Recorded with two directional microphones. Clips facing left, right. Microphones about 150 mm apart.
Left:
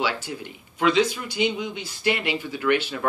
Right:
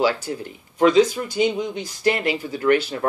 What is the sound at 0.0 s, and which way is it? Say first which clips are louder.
Speech: right 6 dB; 40° right (ahead or behind).